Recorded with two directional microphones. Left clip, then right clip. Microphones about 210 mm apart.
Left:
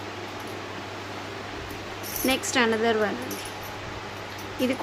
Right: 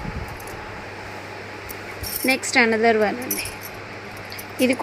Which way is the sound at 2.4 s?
25° right (ahead or behind).